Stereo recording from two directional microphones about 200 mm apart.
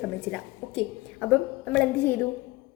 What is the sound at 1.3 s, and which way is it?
Speech, 5° left (ahead or behind).